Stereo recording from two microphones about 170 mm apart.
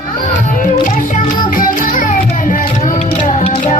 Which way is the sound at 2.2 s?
45° left (ahead or behind).